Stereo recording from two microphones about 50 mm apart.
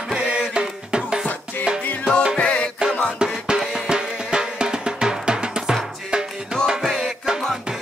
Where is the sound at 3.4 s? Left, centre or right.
Centre.